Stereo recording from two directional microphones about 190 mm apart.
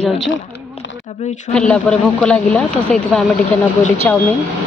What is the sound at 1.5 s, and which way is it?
A woman's voice, 5° left (ahead or behind).